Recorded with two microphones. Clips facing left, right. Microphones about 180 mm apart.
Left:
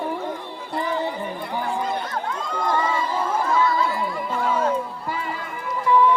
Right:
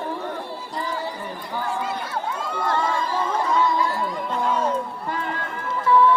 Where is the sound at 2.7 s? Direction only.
10° left (ahead or behind).